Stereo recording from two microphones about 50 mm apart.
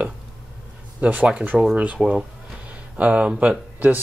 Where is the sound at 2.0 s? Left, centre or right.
Centre.